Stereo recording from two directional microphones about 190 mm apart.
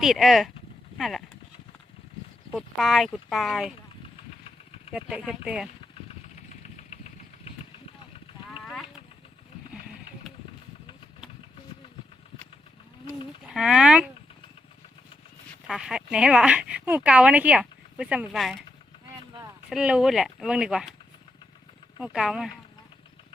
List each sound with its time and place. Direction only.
0.0 s speech: centre (ahead or behind)
2.5 s speech: centre (ahead or behind)
4.9 s speech: 5° right (ahead or behind)
5.9 s engine: 35° left (ahead or behind)
13.4 s speech: 5° right (ahead or behind)
15.6 s speech: centre (ahead or behind)
19.7 s speech: 5° right (ahead or behind)
21.9 s speech: 5° right (ahead or behind)